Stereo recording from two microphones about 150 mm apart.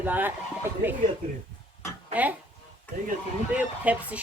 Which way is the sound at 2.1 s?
10° right (ahead or behind).